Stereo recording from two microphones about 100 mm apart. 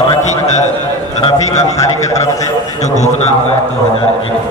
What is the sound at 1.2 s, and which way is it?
Speech, 90° left.